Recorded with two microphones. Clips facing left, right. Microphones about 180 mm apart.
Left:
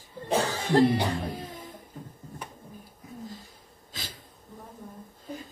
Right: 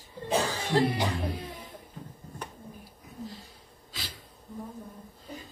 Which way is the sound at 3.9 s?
45° left (ahead or behind).